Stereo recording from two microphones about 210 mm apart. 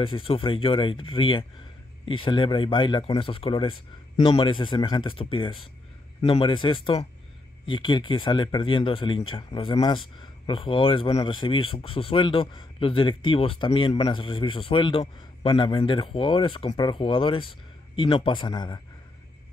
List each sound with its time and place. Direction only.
0.0 s speech: 25° left (ahead or behind)